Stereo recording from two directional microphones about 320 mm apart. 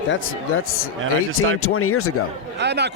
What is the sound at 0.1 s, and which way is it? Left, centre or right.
Speech, left.